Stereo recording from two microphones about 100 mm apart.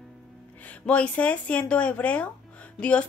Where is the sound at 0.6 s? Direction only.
15° left (ahead or behind).